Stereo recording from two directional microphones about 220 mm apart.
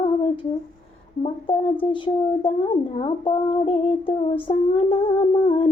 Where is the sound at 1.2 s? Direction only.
25° left (ahead or behind).